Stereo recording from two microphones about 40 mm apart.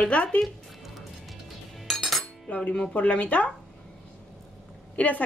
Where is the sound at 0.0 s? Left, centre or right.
Left.